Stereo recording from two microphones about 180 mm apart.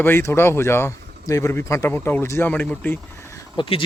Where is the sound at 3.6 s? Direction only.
30° left (ahead or behind).